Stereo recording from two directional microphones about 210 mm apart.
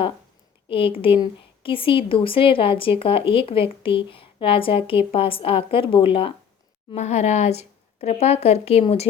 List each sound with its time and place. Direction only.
0.7 s a woman's voice: 25° left (ahead or behind)